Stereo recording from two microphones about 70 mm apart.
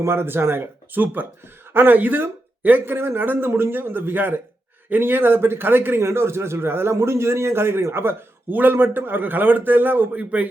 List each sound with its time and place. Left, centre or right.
0.0 s a man's voice: right
10.2 s speech: centre